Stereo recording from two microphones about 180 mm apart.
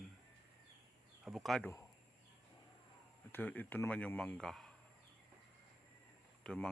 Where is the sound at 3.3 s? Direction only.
10° left (ahead or behind).